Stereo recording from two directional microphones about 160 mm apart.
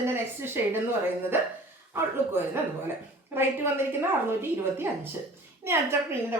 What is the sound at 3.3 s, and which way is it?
Speech, 15° right (ahead or behind).